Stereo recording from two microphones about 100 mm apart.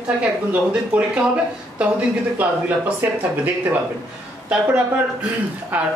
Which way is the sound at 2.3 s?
15° right (ahead or behind).